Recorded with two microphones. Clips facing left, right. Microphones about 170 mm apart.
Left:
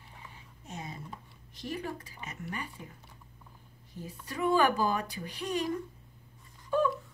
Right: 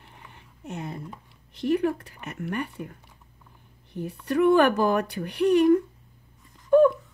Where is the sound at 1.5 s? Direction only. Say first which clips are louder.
Right 13 dB; 65° right (ahead or behind).